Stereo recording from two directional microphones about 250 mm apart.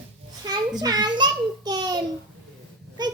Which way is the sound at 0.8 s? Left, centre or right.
Centre.